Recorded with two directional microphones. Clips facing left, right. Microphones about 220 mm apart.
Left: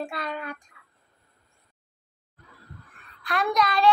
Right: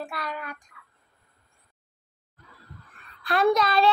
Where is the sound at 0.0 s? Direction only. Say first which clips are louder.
Left 2 dB; 25° left (ahead or behind).